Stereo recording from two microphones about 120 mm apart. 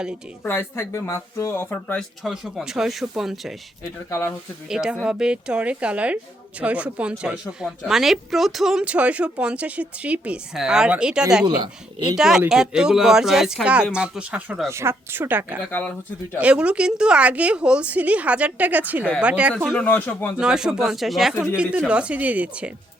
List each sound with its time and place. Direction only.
0.4 s speech: 20° left (ahead or behind)
2.0 s speech: centre (ahead or behind)
4.1 s speech: 20° left (ahead or behind)
4.7 s speech: 5° right (ahead or behind)
11.4 s speech: 40° right (ahead or behind)
12.1 s speech: 5° right (ahead or behind)
14.7 s a woman's voice: 20° right (ahead or behind)
19.7 s speech: 10° left (ahead or behind)
20.4 s speech: 5° right (ahead or behind)